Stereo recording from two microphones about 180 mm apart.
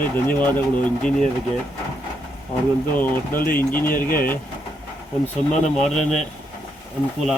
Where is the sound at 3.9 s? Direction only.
55° left (ahead or behind).